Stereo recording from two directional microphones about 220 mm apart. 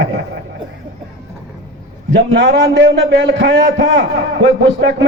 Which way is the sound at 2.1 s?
55° right (ahead or behind).